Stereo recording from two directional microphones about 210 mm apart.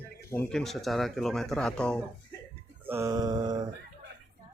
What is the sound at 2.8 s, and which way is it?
Mantra, 15° right (ahead or behind).